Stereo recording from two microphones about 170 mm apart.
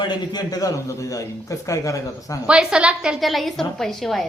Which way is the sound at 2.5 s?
5° right (ahead or behind).